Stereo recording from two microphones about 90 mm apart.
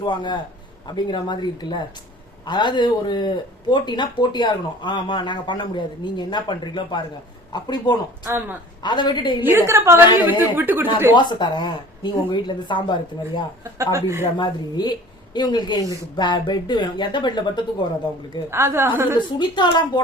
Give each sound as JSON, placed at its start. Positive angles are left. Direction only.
{"t": 0.0, "sound": "speech", "side_deg": 55}
{"t": 8.3, "sound": "a woman's voice", "side_deg": -20}
{"t": 8.8, "sound": "speech", "side_deg": 55}
{"t": 9.6, "sound": "speech", "side_deg": -30}
{"t": 10.2, "sound": "a woman's voice", "side_deg": -20}
{"t": 11.1, "sound": "speech", "side_deg": 55}
{"t": 13.7, "sound": "speech", "side_deg": -35}
{"t": 14.3, "sound": "speech", "side_deg": 55}
{"t": 18.5, "sound": "a woman's voice", "side_deg": -30}
{"t": 19.4, "sound": "speech", "side_deg": 55}